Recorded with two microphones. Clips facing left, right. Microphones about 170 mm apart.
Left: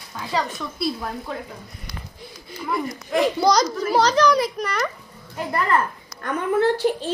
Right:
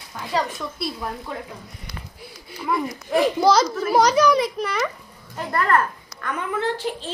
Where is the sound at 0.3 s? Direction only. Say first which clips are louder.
Right 1 dB; centre (ahead or behind).